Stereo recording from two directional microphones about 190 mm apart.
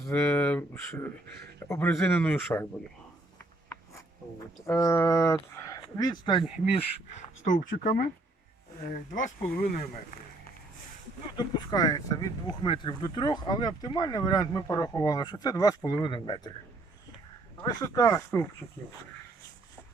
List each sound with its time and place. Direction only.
0.0 s speech: 5° left (ahead or behind)
4.6 s speech: 15° left (ahead or behind)
7.4 s speech: 45° left (ahead or behind)
11.3 s speech: 20° left (ahead or behind)
17.6 s speech: 20° left (ahead or behind)